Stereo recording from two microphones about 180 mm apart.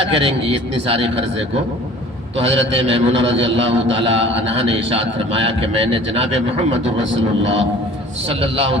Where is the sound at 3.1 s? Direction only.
90° right.